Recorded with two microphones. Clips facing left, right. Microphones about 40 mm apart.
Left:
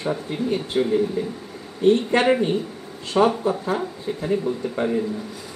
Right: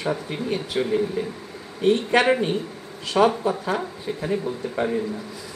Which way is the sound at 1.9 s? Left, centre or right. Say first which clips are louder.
Right 1 dB; right.